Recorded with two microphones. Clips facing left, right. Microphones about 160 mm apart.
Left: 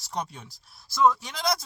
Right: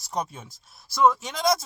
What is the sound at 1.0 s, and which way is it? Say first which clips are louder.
Speech: right 1 dB; 20° right (ahead or behind).